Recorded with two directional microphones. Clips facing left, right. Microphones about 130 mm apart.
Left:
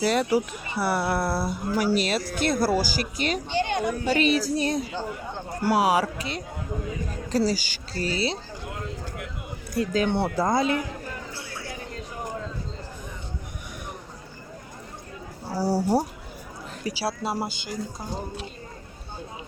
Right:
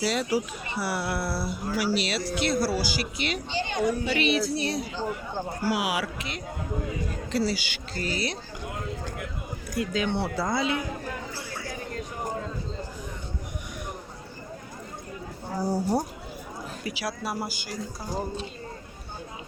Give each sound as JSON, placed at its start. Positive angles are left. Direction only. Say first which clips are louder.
{"t": 0.0, "sound": "speech", "louder": "left 4 dB", "side_deg": 55}
{"t": 9.7, "sound": "speech", "louder": "left 4 dB", "side_deg": 40}
{"t": 15.6, "sound": "speech", "louder": "left 3 dB", "side_deg": 85}
{"t": 16.8, "sound": "speech", "louder": "left 5 dB", "side_deg": 30}